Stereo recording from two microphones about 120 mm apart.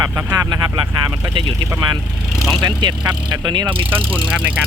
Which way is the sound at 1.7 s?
30° right (ahead or behind).